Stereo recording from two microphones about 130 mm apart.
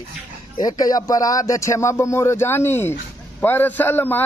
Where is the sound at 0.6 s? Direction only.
30° left (ahead or behind).